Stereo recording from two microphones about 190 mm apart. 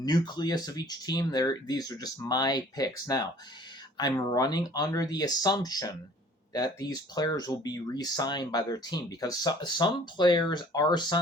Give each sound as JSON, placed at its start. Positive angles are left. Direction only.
{"t": 0.0, "sound": "speech", "side_deg": 20}